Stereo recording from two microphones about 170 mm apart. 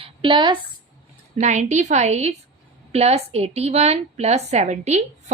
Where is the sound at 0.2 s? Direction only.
30° right (ahead or behind).